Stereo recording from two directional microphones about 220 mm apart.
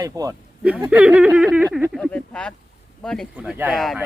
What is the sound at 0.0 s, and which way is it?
Speech, 15° right (ahead or behind).